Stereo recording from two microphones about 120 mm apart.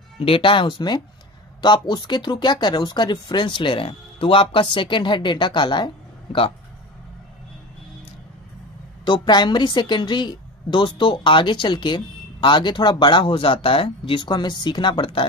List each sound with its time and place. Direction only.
0.2 s a woman's voice: 50° left (ahead or behind)
9.0 s a woman's voice: 40° left (ahead or behind)